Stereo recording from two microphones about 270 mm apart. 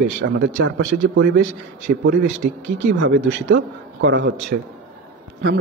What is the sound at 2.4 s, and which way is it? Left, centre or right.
Speech, right.